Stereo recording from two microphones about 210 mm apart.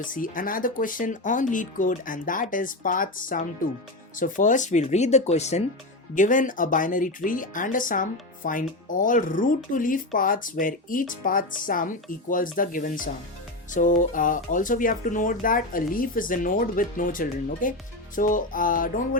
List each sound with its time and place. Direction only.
0.0 s speech: 40° left (ahead or behind)